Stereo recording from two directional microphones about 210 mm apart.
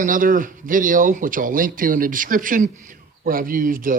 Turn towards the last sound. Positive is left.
turn(degrees=-40)  # may be behind; listen again after turning